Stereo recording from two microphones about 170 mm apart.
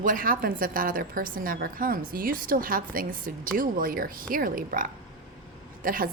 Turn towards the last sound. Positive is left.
turn(degrees=-55)  # may be behind; listen again after turning